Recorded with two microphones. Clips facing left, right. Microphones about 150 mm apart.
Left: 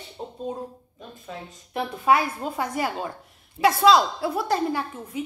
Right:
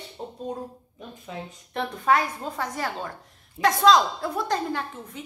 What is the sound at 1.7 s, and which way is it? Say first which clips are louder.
A woman's voice: left 2 dB; 10° left (ahead or behind).